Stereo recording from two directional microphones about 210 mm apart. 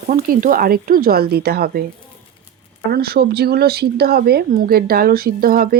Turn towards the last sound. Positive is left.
turn(degrees=-45)  # may be behind; listen again after turning